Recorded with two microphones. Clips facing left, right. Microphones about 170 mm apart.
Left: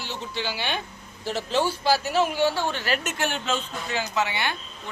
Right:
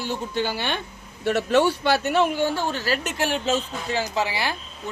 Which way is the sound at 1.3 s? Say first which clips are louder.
Right 6 dB; 65° right (ahead or behind).